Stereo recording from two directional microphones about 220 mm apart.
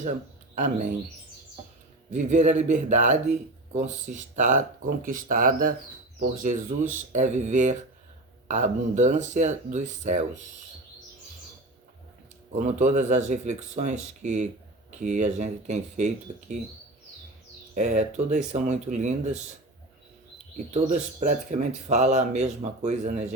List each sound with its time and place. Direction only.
0.0 s speech: 35° right (ahead or behind)
2.0 s speech: 35° right (ahead or behind)
12.5 s speech: 35° right (ahead or behind)
17.7 s speech: 30° right (ahead or behind)
20.7 s speech: 30° right (ahead or behind)